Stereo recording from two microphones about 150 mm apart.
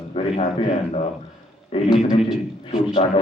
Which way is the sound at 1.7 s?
35° left (ahead or behind).